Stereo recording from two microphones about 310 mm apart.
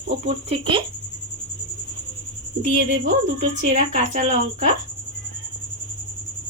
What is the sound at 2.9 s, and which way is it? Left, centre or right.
Speech, right.